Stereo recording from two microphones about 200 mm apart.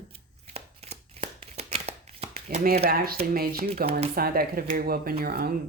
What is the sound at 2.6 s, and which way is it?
Speech, 50° right (ahead or behind).